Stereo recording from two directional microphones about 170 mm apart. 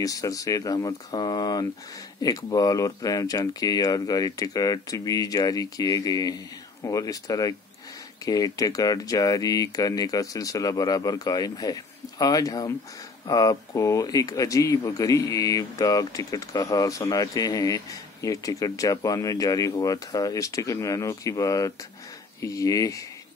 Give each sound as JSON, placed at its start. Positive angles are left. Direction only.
{"t": 0.0, "sound": "speech", "side_deg": 20}